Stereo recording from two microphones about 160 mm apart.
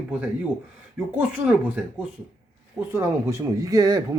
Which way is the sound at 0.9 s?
10° right (ahead or behind).